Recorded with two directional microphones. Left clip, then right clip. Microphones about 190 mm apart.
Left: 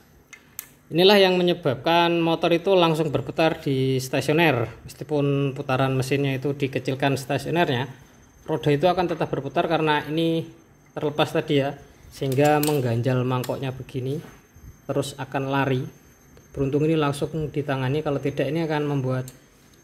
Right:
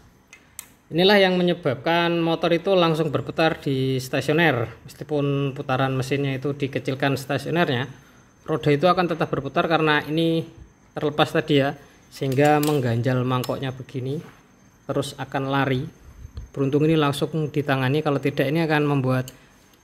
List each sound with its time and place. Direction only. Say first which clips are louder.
0.9 s a man's voice: left 1 dB; centre (ahead or behind); by 19.2 s 25° right (ahead or behind)